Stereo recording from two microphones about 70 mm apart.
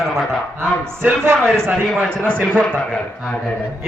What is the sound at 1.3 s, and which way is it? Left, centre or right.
A man's voice, centre.